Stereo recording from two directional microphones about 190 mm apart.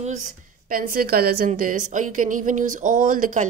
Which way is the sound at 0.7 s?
50° right (ahead or behind).